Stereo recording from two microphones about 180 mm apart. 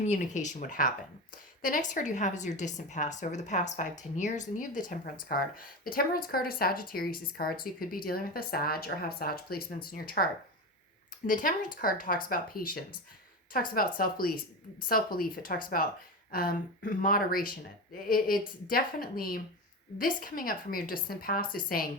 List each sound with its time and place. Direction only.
0.0 s a woman's voice: 40° left (ahead or behind)
11.3 s a woman's voice: 45° left (ahead or behind)